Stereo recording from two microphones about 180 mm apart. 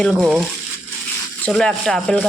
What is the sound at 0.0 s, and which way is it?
Speech, centre (ahead or behind).